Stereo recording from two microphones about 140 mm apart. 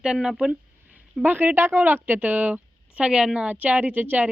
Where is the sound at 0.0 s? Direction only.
5° right (ahead or behind).